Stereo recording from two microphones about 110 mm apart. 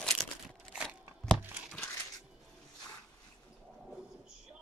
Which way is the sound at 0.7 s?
10° right (ahead or behind).